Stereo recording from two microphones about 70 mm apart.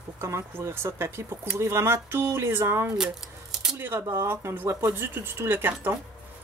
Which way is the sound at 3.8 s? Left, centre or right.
Right.